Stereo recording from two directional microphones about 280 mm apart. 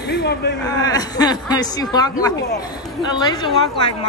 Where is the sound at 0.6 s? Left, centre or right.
Centre.